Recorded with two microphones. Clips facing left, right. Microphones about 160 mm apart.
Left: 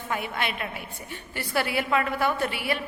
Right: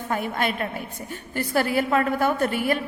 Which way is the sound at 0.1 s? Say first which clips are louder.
Right 4 dB; 45° right (ahead or behind).